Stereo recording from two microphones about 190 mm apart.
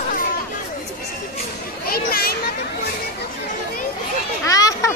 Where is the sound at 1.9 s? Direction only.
55° left (ahead or behind).